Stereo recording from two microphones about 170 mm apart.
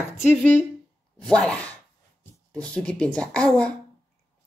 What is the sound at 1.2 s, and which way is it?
A woman's voice, 5° left (ahead or behind).